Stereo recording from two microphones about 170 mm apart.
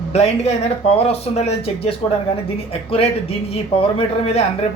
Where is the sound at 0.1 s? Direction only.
40° left (ahead or behind).